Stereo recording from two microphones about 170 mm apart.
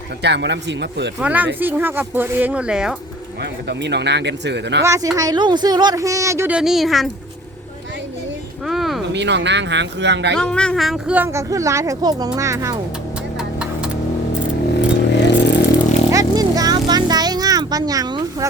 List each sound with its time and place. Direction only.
0.2 s speech: 90° right
1.2 s speech: 10° right (ahead or behind)
3.4 s speech: 85° right
4.8 s speech: 20° right (ahead or behind)
6.6 s speech: centre (ahead or behind)
8.6 s a sound: centre (ahead or behind)
9.1 s speech: 90° right
10.3 s speech: 5° left (ahead or behind); by 12.8 s 20° right (ahead or behind)
14.7 s vehicle: 90° left
16.1 s a sound: 20° right (ahead or behind)